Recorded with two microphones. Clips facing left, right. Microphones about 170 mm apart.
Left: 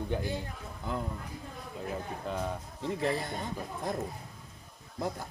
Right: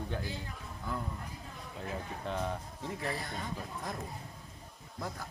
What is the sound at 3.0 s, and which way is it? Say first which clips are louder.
Speech: left 7 dB; 25° left (ahead or behind).